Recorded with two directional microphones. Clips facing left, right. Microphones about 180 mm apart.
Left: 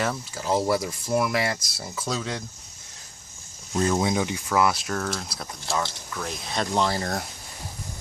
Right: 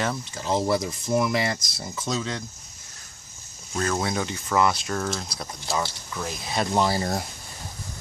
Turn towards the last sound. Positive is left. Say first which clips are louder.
# right 1 dB
turn(degrees=-5)  # may be behind; listen again after turning